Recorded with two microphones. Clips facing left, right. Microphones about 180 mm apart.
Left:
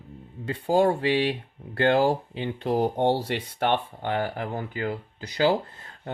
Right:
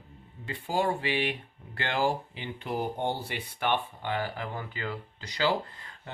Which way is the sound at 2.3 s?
65° left (ahead or behind).